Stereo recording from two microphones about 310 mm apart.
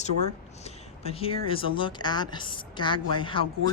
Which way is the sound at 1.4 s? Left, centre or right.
Centre.